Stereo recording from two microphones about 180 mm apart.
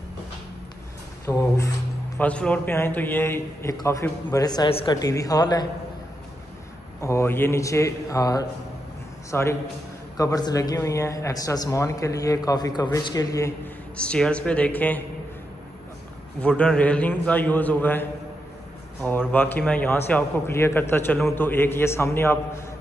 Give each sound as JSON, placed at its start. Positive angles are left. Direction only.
{"t": 1.2, "sound": "a sound", "side_deg": 15}
{"t": 2.1, "sound": "a man's voice", "side_deg": 5}
{"t": 7.0, "sound": "a man's voice", "side_deg": 15}
{"t": 13.9, "sound": "a man's voice", "side_deg": 5}
{"t": 16.3, "sound": "a man's voice", "side_deg": 5}
{"t": 19.0, "sound": "a man's voice", "side_deg": 10}